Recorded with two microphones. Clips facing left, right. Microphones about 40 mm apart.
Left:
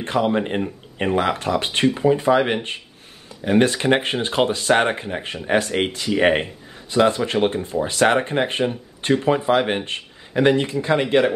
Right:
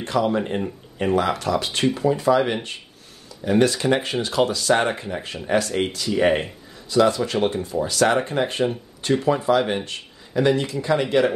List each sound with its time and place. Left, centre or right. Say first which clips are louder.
0.0 s speech: left 1 dB; left